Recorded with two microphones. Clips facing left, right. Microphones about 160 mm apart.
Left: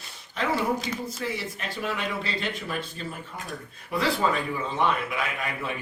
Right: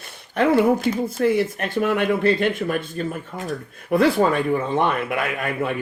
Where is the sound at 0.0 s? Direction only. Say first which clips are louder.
Right 10 dB; 55° right (ahead or behind).